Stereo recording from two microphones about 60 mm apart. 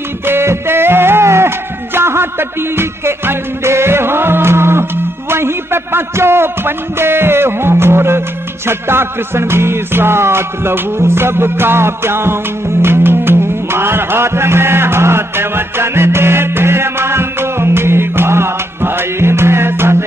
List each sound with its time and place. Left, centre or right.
0.3 s music: right